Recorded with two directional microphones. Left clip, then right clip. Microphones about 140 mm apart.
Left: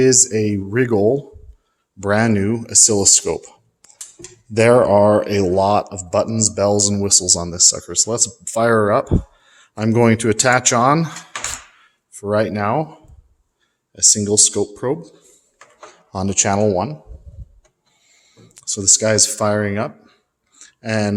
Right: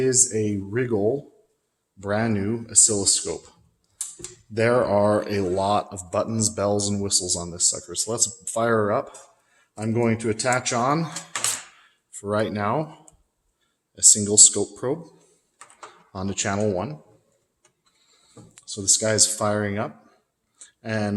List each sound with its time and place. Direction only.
0.0 s speech: 35° left (ahead or behind)
4.5 s speech: 35° left (ahead or behind)
9.5 s speech: 55° left (ahead or behind)
12.1 s speech: 25° left (ahead or behind)
18.5 s speech: 40° left (ahead or behind)
20.6 s a sound: 30° left (ahead or behind)